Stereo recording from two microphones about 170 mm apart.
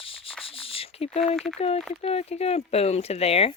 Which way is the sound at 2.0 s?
35° left (ahead or behind).